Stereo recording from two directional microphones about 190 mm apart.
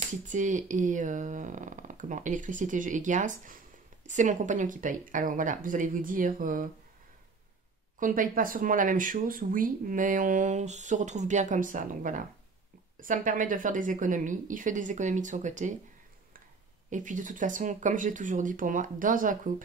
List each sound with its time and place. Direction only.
0.2 s speech: 40° right (ahead or behind)
8.0 s speech: 45° right (ahead or behind)
16.9 s speech: 40° right (ahead or behind)